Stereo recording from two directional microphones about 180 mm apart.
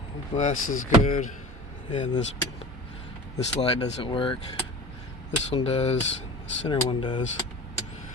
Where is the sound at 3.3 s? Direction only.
30° left (ahead or behind).